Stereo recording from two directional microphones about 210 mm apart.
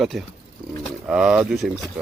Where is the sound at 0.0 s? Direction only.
Centre (ahead or behind).